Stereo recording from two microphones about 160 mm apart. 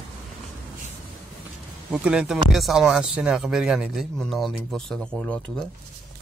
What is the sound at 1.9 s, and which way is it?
Speech, 5° right (ahead or behind).